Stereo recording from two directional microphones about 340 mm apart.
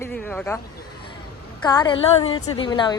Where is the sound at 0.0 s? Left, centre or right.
Centre.